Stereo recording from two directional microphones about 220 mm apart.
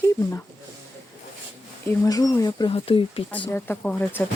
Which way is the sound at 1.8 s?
15° left (ahead or behind).